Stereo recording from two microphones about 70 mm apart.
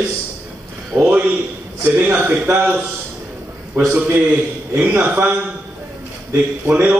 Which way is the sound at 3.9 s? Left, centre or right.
Right.